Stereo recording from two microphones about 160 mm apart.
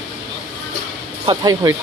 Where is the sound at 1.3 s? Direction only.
25° right (ahead or behind).